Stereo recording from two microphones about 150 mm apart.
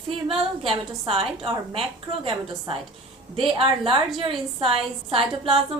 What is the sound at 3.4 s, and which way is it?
A woman's voice, 35° right (ahead or behind).